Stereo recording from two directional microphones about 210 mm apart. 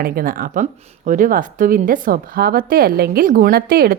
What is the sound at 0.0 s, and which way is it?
Speech, 45° right (ahead or behind).